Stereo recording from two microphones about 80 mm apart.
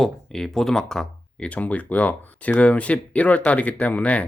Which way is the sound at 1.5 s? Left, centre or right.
Centre.